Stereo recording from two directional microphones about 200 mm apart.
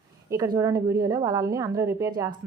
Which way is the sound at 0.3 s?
20° right (ahead or behind).